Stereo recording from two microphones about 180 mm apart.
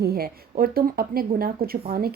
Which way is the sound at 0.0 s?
60° right (ahead or behind).